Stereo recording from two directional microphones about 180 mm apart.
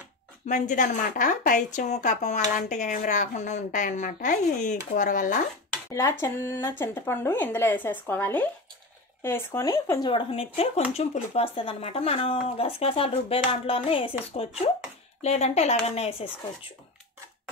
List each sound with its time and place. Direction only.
0.5 s speech: 45° left (ahead or behind)
5.9 s speech: 15° left (ahead or behind); by 16.3 s 35° left (ahead or behind)